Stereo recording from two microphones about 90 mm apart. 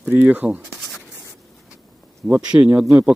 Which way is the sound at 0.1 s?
20° right (ahead or behind).